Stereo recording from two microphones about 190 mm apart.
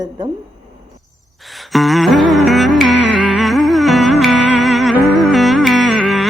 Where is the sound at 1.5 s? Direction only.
Centre (ahead or behind).